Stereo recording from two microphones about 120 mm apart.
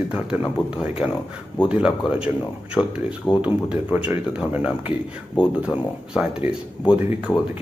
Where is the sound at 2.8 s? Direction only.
20° left (ahead or behind).